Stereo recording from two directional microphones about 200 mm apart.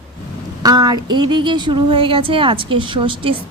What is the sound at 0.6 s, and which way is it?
Speech, 20° right (ahead or behind).